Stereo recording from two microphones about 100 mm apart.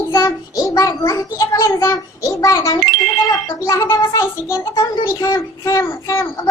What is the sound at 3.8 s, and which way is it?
A child's voice, 25° left (ahead or behind).